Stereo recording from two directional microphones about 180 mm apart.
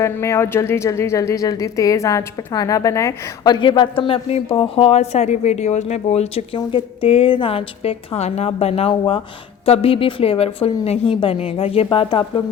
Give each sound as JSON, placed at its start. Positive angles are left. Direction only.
{"t": 0.0, "sound": "a woman's voice", "side_deg": 15}